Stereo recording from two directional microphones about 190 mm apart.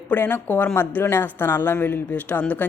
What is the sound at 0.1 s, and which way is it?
Speech, 10° left (ahead or behind).